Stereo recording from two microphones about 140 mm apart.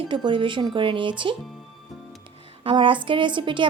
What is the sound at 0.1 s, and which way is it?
A woman's voice, 35° right (ahead or behind).